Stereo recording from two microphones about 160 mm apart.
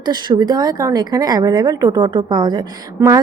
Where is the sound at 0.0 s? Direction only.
25° right (ahead or behind).